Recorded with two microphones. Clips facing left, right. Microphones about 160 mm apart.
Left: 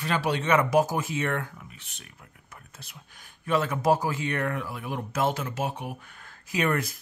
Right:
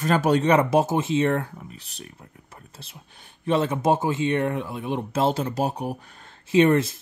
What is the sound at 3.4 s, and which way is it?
Speech, 25° right (ahead or behind).